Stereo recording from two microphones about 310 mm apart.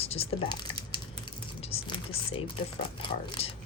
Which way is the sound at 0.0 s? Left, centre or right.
Centre.